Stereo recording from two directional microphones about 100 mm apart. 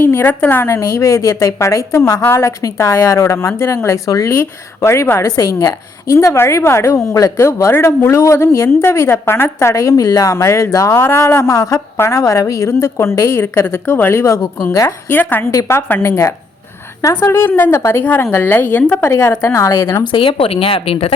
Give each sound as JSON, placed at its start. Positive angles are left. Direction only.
{"t": 0.0, "sound": "a woman's voice", "side_deg": 25}
{"t": 15.1, "sound": "a woman's voice", "side_deg": 20}
{"t": 19.1, "sound": "a woman's voice", "side_deg": 30}
{"t": 20.1, "sound": "speech", "side_deg": 65}